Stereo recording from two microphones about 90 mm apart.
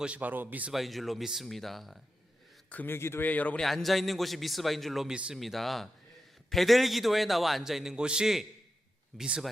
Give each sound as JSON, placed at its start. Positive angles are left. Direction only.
{"t": 0.0, "sound": "a man's voice", "side_deg": -15}
{"t": 0.7, "sound": "a man's voice", "side_deg": 0}
{"t": 2.6, "sound": "speech", "side_deg": 20}
{"t": 3.6, "sound": "a man's voice", "side_deg": 5}
{"t": 5.1, "sound": "a man's voice", "side_deg": -10}
{"t": 5.4, "sound": "a man's voice", "side_deg": 0}